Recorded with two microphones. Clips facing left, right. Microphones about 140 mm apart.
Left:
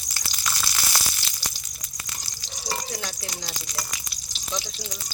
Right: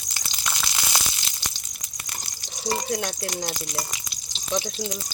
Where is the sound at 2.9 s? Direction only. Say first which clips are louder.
Right 6 dB; 50° right (ahead or behind).